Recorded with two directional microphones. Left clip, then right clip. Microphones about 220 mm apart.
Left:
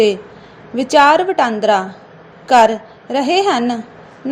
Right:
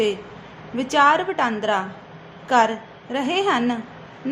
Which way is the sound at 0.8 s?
20° left (ahead or behind).